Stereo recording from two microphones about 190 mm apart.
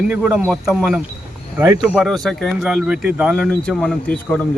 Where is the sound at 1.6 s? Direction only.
15° right (ahead or behind).